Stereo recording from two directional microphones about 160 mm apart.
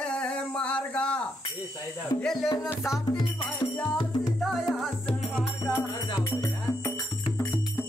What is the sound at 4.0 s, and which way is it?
Music, 25° left (ahead or behind).